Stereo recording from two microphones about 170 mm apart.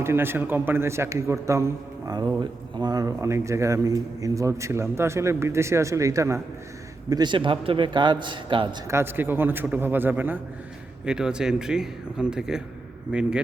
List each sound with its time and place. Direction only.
0.0 s a man's voice: 15° right (ahead or behind)
8.9 s a man's voice: 15° right (ahead or behind)